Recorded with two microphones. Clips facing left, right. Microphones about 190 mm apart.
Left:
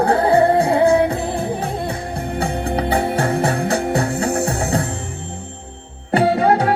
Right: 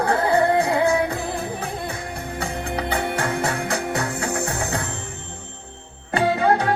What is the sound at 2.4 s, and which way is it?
Music, 30° left (ahead or behind).